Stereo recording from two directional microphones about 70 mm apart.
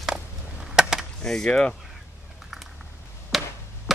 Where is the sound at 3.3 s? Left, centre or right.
Centre.